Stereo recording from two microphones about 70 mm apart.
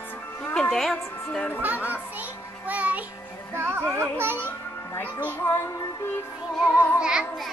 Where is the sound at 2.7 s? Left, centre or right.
Right.